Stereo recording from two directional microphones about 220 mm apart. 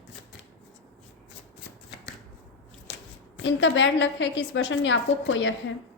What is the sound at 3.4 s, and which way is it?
A woman's voice, 55° left (ahead or behind).